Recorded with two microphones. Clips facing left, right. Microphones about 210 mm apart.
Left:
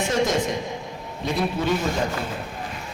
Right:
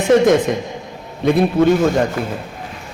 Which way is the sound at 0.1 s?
60° right (ahead or behind).